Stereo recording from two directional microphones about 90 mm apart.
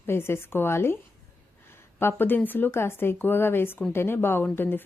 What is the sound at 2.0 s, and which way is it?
A woman's voice, 25° left (ahead or behind).